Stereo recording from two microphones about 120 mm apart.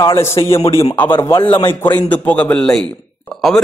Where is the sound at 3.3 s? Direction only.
5° left (ahead or behind).